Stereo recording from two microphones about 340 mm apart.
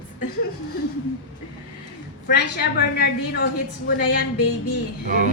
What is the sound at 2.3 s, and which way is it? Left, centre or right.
A woman's voice, left.